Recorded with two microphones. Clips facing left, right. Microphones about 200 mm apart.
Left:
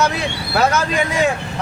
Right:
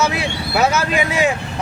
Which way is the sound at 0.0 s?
5° right (ahead or behind).